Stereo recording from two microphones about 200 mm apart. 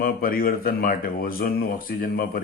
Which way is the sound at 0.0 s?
45° left (ahead or behind).